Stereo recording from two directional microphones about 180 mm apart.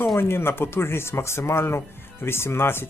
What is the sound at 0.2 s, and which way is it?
Speech, 15° left (ahead or behind).